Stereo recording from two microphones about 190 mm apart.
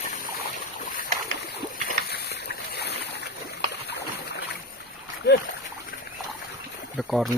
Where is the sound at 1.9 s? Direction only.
55° left (ahead or behind).